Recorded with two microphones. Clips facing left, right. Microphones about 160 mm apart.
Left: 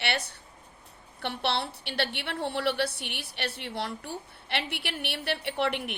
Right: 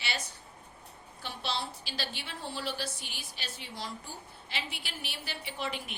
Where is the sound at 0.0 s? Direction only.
65° left (ahead or behind).